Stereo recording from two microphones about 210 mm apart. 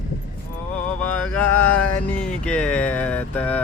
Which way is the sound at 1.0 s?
10° left (ahead or behind).